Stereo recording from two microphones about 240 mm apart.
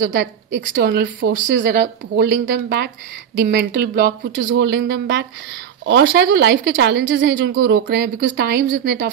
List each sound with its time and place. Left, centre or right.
0.0 s a woman's voice: right